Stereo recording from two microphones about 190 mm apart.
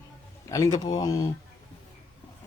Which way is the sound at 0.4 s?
15° left (ahead or behind).